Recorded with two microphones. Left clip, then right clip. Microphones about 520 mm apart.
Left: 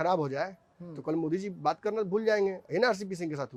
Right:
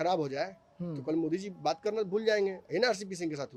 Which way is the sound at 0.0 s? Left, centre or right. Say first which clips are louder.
Left 2 dB; left.